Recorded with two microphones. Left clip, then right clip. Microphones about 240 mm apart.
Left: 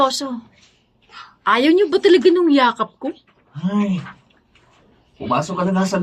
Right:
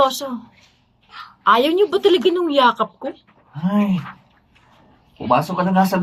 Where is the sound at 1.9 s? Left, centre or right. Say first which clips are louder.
Left 3 dB; left.